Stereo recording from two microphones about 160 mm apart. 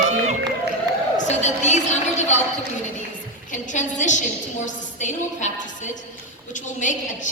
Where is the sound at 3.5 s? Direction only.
50° left (ahead or behind).